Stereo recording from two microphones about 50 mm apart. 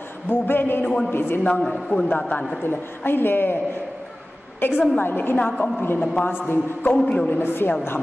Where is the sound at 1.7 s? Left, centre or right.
Centre.